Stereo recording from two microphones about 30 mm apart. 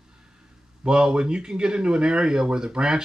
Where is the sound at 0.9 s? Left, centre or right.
Right.